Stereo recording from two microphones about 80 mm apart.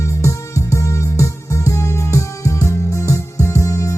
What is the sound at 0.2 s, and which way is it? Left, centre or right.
Music, left.